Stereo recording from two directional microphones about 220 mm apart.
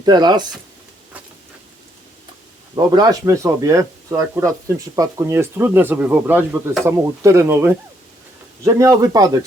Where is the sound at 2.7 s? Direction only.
20° right (ahead or behind).